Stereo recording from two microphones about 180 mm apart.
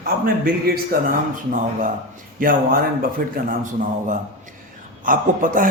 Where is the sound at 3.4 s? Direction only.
45° right (ahead or behind).